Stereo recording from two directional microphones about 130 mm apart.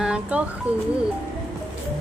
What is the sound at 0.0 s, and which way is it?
Speech, 10° right (ahead or behind).